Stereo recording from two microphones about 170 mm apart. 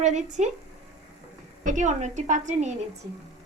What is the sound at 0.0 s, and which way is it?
Speech, 45° right (ahead or behind).